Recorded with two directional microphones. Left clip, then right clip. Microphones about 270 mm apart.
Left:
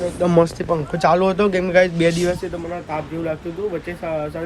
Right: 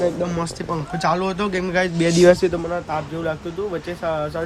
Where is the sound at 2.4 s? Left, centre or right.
Right.